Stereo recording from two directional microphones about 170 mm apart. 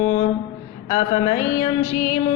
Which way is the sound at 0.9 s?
25° left (ahead or behind).